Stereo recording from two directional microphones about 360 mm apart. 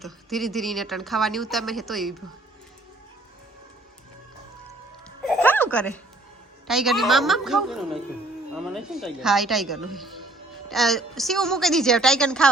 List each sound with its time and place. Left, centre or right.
0.0 s a woman's voice: centre
5.2 s a sound: centre
6.7 s a woman's voice: centre